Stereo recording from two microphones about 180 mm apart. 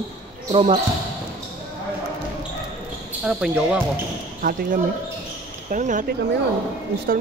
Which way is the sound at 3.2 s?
5° right (ahead or behind).